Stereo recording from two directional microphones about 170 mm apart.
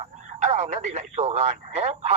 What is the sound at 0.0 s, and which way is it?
Speech, 45° right (ahead or behind).